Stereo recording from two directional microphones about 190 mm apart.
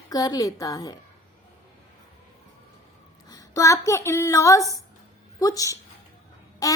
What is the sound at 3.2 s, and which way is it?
A woman's voice, 15° left (ahead or behind).